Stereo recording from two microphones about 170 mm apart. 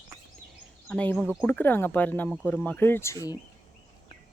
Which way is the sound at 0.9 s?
5° left (ahead or behind).